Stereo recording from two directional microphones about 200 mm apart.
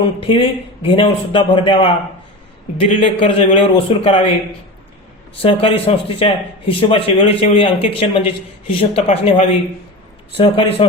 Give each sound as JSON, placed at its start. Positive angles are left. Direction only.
{"t": 0.0, "sound": "speech", "side_deg": 25}
{"t": 5.4, "sound": "speech", "side_deg": 25}